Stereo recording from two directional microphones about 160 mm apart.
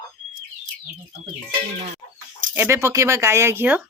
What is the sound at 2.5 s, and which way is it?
Speech, 15° right (ahead or behind).